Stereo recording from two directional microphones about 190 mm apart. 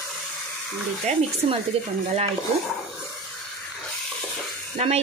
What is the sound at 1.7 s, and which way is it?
Speech, 30° right (ahead or behind).